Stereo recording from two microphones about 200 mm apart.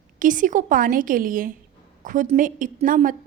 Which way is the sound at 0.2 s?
40° right (ahead or behind).